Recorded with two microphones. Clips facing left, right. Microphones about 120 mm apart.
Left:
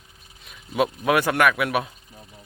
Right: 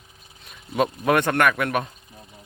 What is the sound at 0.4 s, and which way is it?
Speech, centre (ahead or behind).